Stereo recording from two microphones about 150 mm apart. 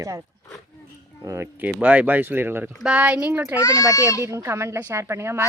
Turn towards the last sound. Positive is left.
turn(degrees=-20)  # may be behind; listen again after turning